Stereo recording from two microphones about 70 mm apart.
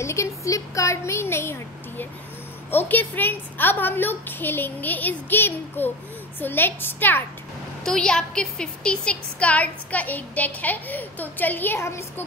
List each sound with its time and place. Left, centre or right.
0.0 s a sound: left
2.7 s a woman's voice: left
7.8 s a woman's voice: centre; by 11.8 s left